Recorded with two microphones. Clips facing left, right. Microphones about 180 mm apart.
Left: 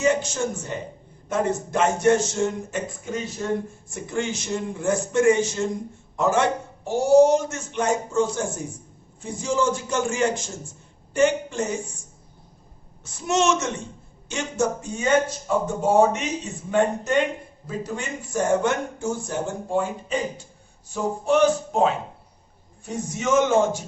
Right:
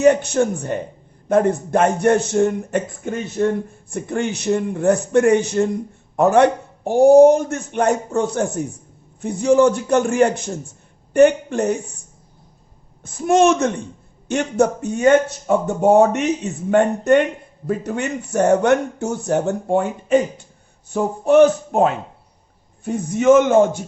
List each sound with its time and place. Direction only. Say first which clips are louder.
0.0 s speech: right 8 dB; 60° right (ahead or behind)